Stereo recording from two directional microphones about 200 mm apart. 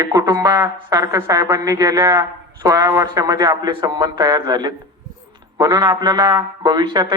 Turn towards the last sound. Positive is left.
turn(degrees=-20)  # may be behind; listen again after turning